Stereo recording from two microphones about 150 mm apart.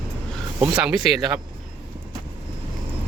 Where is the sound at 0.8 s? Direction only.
5° right (ahead or behind).